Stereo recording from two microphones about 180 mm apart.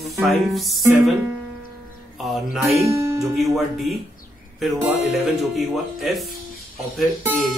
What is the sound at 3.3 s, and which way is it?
Speech, centre (ahead or behind).